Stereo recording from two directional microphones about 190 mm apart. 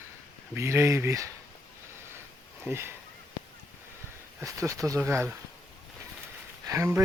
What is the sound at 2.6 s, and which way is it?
Speech, 15° right (ahead or behind).